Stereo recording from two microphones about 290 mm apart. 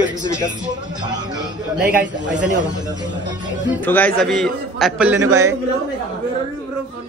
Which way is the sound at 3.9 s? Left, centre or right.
Centre.